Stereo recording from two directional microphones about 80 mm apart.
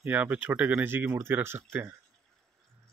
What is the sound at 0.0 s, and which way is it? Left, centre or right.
Speech, centre.